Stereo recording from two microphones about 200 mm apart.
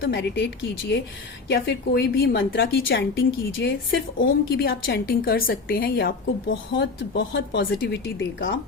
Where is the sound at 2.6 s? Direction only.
70° left (ahead or behind).